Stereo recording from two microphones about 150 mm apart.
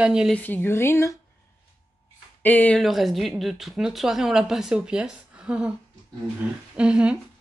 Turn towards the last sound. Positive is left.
turn(degrees=-5)  # may be behind; listen again after turning